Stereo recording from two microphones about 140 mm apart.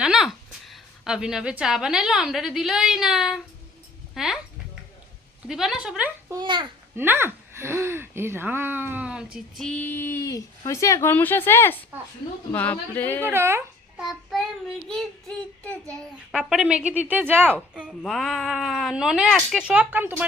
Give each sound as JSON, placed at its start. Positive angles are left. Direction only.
{"t": 0.0, "sound": "a woman's voice", "side_deg": -5}
{"t": 4.1, "sound": "a sound", "side_deg": -5}
{"t": 5.5, "sound": "speech", "side_deg": -5}
{"t": 6.3, "sound": "a child's voice", "side_deg": -35}
{"t": 6.9, "sound": "speech", "side_deg": -15}
{"t": 9.6, "sound": "speech", "side_deg": 10}
{"t": 13.0, "sound": "speech", "side_deg": 10}
{"t": 13.3, "sound": "speech", "side_deg": -15}
{"t": 14.0, "sound": "speech", "side_deg": 0}
{"t": 16.0, "sound": "a woman's voice", "side_deg": -5}
{"t": 18.0, "sound": "speech", "side_deg": 0}